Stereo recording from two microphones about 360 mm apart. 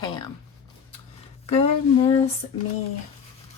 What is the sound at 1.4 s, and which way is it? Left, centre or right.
Speech, centre.